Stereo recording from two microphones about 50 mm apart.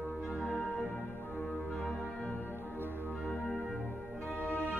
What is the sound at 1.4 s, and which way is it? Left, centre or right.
Music, centre.